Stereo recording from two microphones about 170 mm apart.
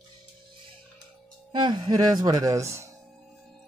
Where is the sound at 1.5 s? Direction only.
25° right (ahead or behind).